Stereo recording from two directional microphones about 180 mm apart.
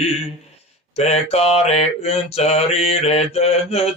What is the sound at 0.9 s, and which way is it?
Mantra, 35° left (ahead or behind).